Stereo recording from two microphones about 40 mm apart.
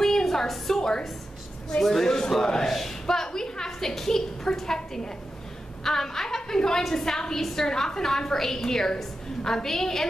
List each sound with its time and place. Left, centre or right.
0.0 s a sound: centre
1.8 s a man's voice: centre
2.0 s a woman's voice: centre